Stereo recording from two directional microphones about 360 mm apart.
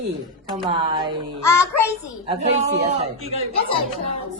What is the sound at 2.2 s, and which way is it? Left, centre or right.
Speech, centre.